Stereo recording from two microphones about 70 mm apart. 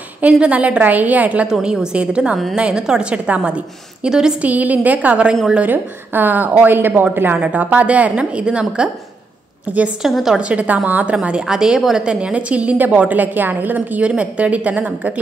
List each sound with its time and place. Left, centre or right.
0.2 s a woman's voice: centre
1.5 s a woman's voice: centre
4.4 s a woman's voice: right
10.0 s a woman's voice: centre
10.4 s a woman's voice: centre